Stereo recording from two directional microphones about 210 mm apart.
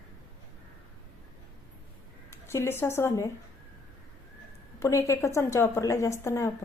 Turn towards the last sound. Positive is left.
turn(degrees=15)  # may be behind; listen again after turning